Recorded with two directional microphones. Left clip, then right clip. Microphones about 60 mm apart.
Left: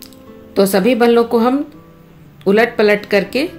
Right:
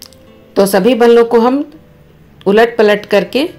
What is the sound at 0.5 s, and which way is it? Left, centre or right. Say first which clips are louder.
A woman's voice: right 3 dB; right.